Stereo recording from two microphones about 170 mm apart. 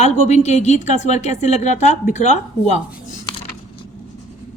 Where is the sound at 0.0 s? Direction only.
40° left (ahead or behind).